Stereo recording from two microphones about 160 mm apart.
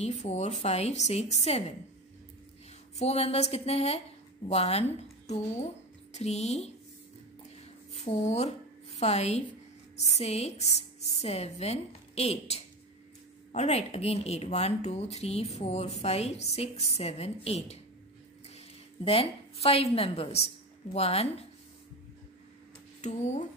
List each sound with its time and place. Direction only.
0.0 s a woman's voice: 45° left (ahead or behind)
3.0 s a woman's voice: 40° left (ahead or behind)
7.9 s speech: 40° left (ahead or behind)
19.0 s speech: 35° left (ahead or behind)
22.9 s speech: 45° left (ahead or behind)